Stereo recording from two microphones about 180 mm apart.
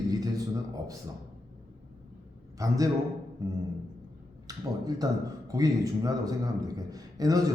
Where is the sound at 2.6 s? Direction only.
20° right (ahead or behind).